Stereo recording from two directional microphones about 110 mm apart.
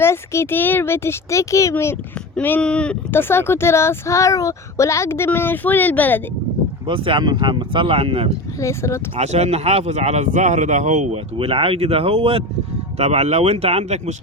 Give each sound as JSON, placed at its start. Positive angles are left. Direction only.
{"t": 0.0, "sound": "speech", "side_deg": 20}
{"t": 3.1, "sound": "speech", "side_deg": 20}
{"t": 6.8, "sound": "speech", "side_deg": -50}
{"t": 8.6, "sound": "speech", "side_deg": 25}
{"t": 9.1, "sound": "a man's voice", "side_deg": -90}
{"t": 11.3, "sound": "speech", "side_deg": -60}
{"t": 13.0, "sound": "speech", "side_deg": -80}